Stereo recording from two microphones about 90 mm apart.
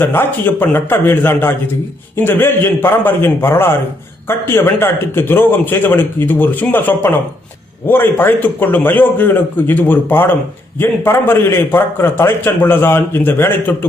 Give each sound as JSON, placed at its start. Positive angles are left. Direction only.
{"t": 0.0, "sound": "a man's voice", "side_deg": 25}